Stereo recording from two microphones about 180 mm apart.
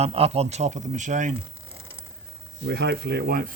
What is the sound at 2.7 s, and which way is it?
Speech, 70° right (ahead or behind).